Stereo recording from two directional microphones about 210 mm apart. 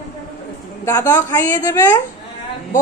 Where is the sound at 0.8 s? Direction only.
15° left (ahead or behind).